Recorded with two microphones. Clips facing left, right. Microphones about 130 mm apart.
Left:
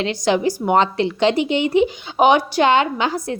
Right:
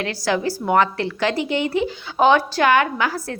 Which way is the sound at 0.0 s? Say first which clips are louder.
Left 4 dB; 20° left (ahead or behind).